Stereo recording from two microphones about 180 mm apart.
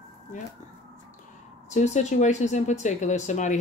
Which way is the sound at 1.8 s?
40° left (ahead or behind).